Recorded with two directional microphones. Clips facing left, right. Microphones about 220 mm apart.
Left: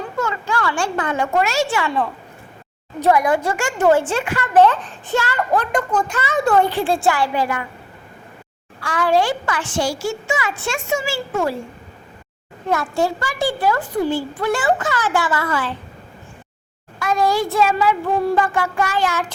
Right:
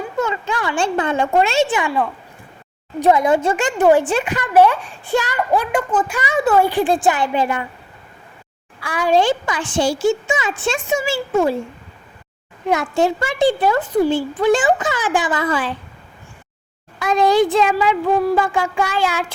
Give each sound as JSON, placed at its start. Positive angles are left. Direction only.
{"t": 0.2, "sound": "speech", "side_deg": -20}
{"t": 3.0, "sound": "speech", "side_deg": -20}
{"t": 8.8, "sound": "a child's voice", "side_deg": -10}
{"t": 12.6, "sound": "a child's voice", "side_deg": -15}
{"t": 17.0, "sound": "speech", "side_deg": -20}
{"t": 18.2, "sound": "speech", "side_deg": -5}